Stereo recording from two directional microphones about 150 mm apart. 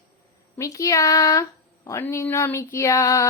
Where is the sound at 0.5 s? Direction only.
20° left (ahead or behind).